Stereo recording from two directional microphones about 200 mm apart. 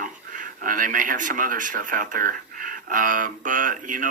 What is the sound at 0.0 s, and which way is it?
Speech, 40° right (ahead or behind).